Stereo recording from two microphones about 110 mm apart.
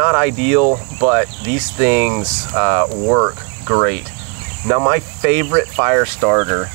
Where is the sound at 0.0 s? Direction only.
25° right (ahead or behind).